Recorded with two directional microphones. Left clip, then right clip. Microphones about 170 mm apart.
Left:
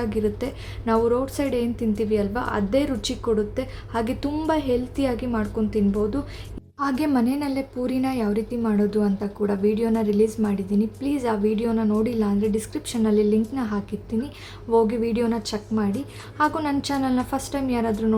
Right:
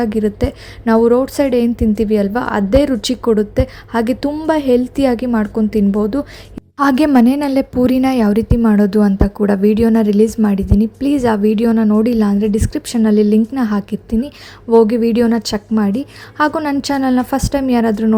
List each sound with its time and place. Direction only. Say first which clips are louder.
0.0 s a woman's voice: right 8 dB; 40° right (ahead or behind)